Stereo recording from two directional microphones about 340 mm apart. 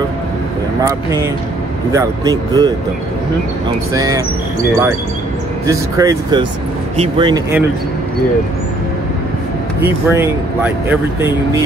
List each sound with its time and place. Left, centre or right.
0.8 s speech: centre
3.9 s speech: centre
5.7 s speech: centre
9.8 s speech: centre